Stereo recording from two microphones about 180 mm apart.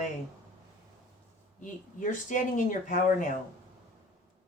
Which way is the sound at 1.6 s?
45° left (ahead or behind).